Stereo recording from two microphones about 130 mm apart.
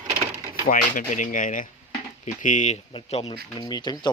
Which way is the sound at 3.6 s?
30° left (ahead or behind).